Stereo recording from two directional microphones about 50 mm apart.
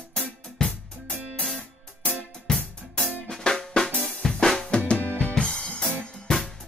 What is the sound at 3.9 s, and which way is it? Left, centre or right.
Drum kit, centre.